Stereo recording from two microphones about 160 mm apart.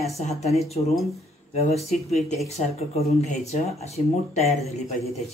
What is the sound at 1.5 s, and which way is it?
Speech, 40° left (ahead or behind).